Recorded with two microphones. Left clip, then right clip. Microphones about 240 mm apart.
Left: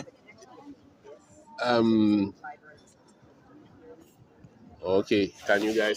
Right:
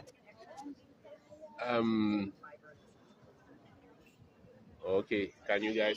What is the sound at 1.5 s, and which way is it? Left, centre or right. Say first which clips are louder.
Speech: left 9 dB; left.